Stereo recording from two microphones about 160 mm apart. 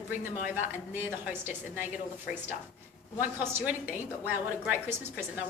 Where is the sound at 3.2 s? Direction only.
10° right (ahead or behind).